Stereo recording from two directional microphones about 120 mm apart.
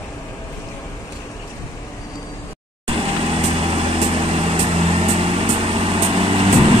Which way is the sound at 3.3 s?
55° right (ahead or behind).